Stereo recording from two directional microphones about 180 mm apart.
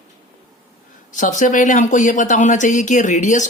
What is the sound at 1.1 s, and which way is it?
Speech, 45° left (ahead or behind).